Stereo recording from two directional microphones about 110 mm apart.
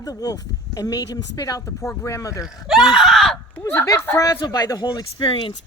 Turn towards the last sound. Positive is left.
turn(degrees=45)  # may be behind; listen again after turning